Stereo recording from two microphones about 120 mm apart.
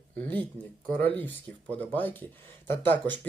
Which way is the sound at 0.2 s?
15° left (ahead or behind).